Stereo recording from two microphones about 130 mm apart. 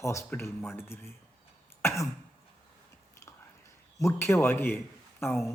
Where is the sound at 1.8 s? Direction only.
20° left (ahead or behind).